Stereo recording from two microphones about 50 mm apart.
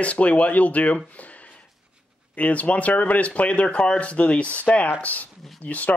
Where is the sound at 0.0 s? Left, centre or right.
Left.